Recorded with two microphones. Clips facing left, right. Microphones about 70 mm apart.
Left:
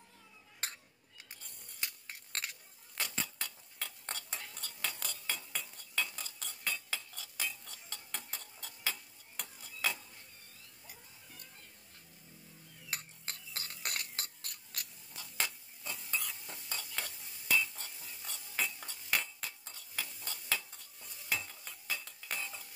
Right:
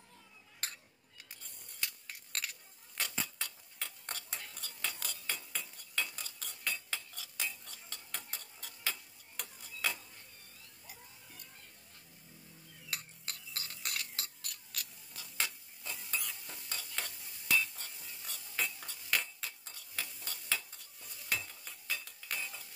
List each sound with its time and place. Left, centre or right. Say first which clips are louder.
1.8 s a sound: right 1 dB; left
3.0 s mechanisms: even; centre
4.1 s stir: left 1 dB; centre
5.3 s cutlery: left 1 dB; centre
9.4 s stir: left 1 dB; centre
12.9 s stir: left 1 dB; left
13.9 s a sound: even; left
15.1 s stir: left 1 dB; centre